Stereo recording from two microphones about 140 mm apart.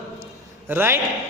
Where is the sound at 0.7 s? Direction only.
15° right (ahead or behind).